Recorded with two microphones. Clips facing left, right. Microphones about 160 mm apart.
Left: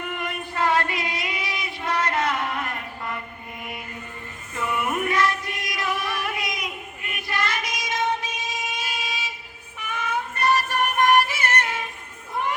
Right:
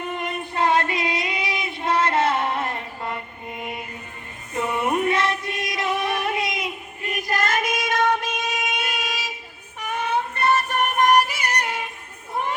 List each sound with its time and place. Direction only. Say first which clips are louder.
0.0 s child singing: right 2 dB; 25° right (ahead or behind)
4.5 s music: right 3 dB; 25° right (ahead or behind)
7.1 s child singing: right 5 dB; 40° right (ahead or behind); by 9.1 s 65° right (ahead or behind)
9.7 s music: right 4 dB; 40° right (ahead or behind); by 11.8 s 15° right (ahead or behind)